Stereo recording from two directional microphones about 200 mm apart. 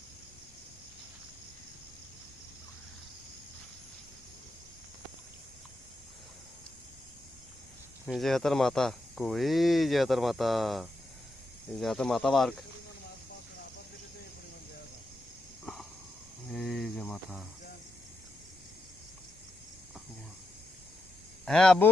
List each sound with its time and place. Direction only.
8.0 s speech: centre (ahead or behind)
15.6 s a sound: centre (ahead or behind)
16.5 s speech: centre (ahead or behind)
21.4 s speech: 5° left (ahead or behind)